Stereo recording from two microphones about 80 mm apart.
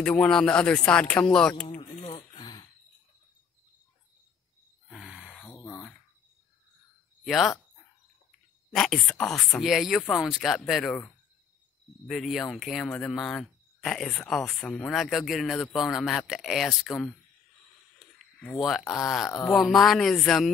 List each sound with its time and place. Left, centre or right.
0.0 s speech: centre
4.8 s a sound: centre
7.2 s speech: centre
8.7 s speech: centre
9.6 s speech: centre
12.1 s speech: centre
18.6 s speech: centre